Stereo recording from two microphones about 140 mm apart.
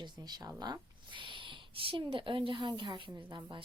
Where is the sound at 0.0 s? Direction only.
30° right (ahead or behind).